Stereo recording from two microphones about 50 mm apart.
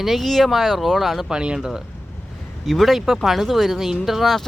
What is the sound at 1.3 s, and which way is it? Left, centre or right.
Speech, centre.